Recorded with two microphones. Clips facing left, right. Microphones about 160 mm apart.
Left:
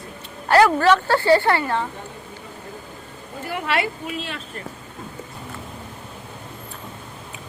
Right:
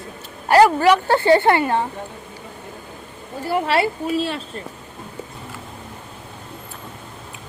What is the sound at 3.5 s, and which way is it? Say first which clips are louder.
Speech: right 5 dB; 30° right (ahead or behind).